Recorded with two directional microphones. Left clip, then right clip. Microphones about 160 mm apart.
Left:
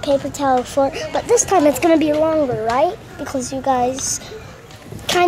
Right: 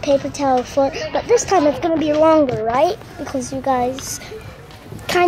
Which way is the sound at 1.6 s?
15° left (ahead or behind).